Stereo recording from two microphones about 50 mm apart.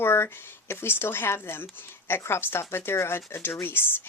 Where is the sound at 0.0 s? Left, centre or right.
Left.